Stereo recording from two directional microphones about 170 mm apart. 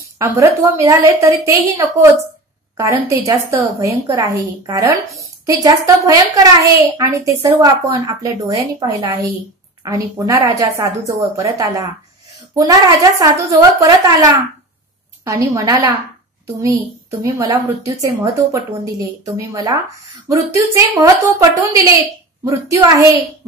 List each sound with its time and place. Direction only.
0.2 s a woman's voice: 15° right (ahead or behind)
15.2 s speech: 20° right (ahead or behind)
17.2 s speech: 20° right (ahead or behind)